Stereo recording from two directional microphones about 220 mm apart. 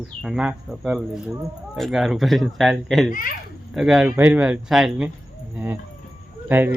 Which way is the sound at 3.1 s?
40° left (ahead or behind).